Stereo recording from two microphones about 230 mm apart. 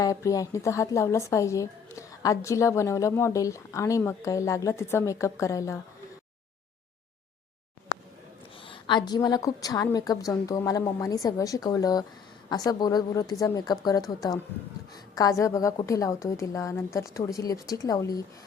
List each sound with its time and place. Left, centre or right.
0.0 s speech: centre
8.6 s speech: left
15.1 s speech: centre